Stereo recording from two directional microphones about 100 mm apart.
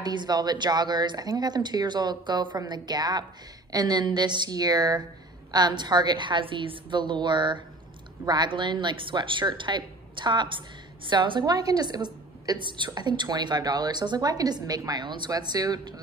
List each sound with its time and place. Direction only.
0.0 s a woman's voice: 45° right (ahead or behind)